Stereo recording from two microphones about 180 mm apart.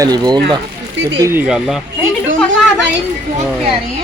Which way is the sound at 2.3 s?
90° right.